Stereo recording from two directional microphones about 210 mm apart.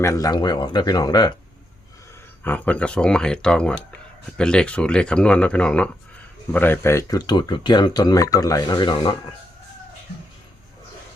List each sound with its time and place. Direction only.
0.0 s speech: 15° left (ahead or behind)
2.4 s speech: 5° left (ahead or behind)